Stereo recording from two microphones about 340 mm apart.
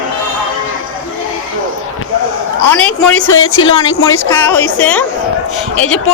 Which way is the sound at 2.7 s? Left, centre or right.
Left.